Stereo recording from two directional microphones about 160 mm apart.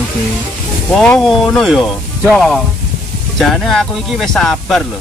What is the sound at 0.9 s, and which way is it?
Speech, 5° left (ahead or behind).